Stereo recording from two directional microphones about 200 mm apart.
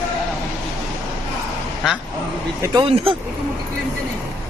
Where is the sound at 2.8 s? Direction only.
30° right (ahead or behind).